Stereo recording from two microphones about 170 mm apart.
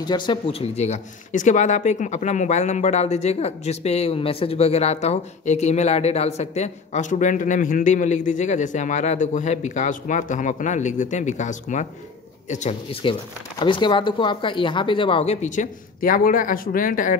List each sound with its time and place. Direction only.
0.0 s speech: 25° left (ahead or behind); by 12.7 s 45° left (ahead or behind)
13.0 s speech: 30° left (ahead or behind); by 17.2 s 50° left (ahead or behind)